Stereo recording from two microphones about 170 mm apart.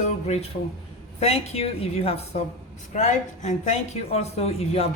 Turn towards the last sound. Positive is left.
turn(degrees=35)  # may be behind; listen again after turning